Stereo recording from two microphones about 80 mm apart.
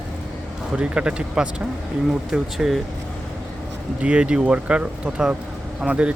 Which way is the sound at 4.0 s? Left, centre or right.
Centre.